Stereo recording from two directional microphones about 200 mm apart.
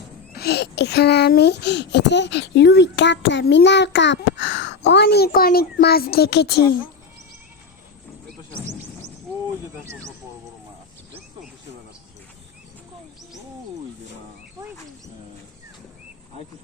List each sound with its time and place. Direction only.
0.3 s a child's voice: 55° left (ahead or behind)
9.8 s speech: 15° right (ahead or behind)